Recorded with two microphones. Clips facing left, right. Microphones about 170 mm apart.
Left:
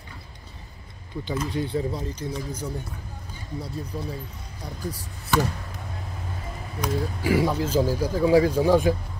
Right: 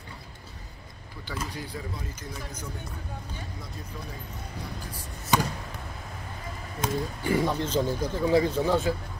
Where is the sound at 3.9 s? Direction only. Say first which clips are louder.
Left 8 dB; 35° left (ahead or behind).